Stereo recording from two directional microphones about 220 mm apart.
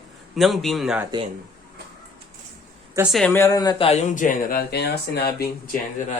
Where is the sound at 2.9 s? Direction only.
5° right (ahead or behind); by 5.5 s 45° left (ahead or behind).